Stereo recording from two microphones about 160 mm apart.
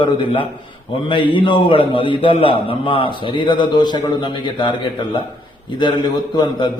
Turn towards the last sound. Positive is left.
turn(degrees=30)  # may be behind; listen again after turning